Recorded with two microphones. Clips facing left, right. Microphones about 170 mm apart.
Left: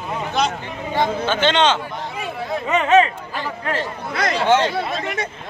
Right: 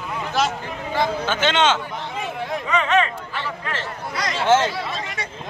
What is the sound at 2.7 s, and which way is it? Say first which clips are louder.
Speech: left 5 dB; 30° left (ahead or behind).